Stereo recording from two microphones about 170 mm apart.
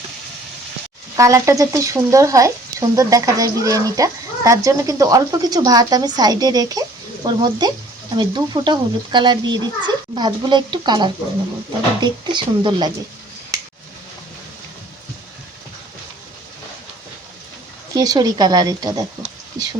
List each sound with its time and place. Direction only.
1.1 s speech: 20° right (ahead or behind)
17.9 s speech: 20° right (ahead or behind)